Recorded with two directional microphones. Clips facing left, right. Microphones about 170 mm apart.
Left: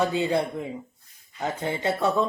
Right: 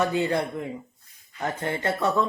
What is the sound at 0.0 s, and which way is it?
Speech, 15° left (ahead or behind).